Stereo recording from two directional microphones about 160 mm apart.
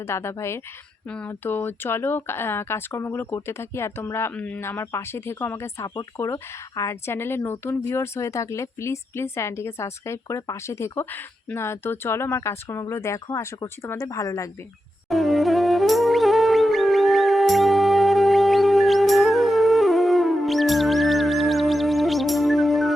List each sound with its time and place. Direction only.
0.1 s speech: 15° left (ahead or behind)
15.1 s music: centre (ahead or behind)